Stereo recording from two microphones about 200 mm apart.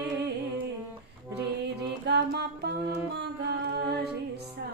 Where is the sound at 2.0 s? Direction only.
55° right (ahead or behind).